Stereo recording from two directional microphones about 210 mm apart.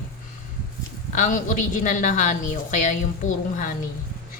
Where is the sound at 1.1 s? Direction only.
40° left (ahead or behind).